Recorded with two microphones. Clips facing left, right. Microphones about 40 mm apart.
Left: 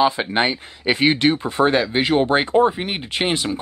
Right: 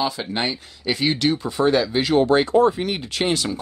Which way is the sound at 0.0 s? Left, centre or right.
Left.